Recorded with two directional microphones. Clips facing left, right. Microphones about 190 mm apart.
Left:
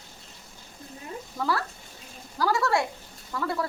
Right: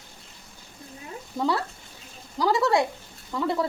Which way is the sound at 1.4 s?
20° right (ahead or behind).